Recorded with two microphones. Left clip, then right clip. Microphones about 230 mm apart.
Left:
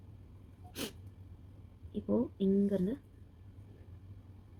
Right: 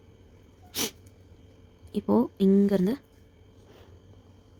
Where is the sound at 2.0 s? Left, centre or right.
Right.